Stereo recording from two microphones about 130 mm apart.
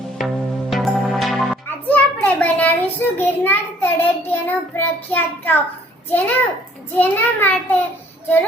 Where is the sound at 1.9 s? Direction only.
10° left (ahead or behind).